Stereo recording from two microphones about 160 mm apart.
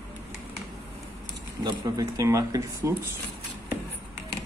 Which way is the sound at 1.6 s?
20° right (ahead or behind).